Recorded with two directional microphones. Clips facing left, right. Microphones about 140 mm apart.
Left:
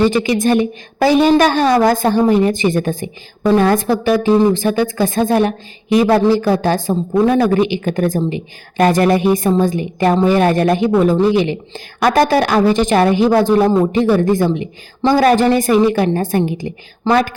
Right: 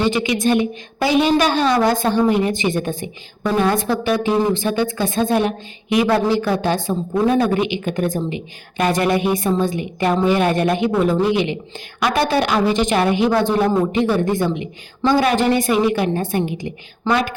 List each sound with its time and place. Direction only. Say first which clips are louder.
0.2 s a woman's voice: left 3 dB; 40° left (ahead or behind)